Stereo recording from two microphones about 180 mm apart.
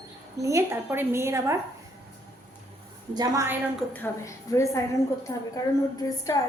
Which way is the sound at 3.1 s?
20° right (ahead or behind).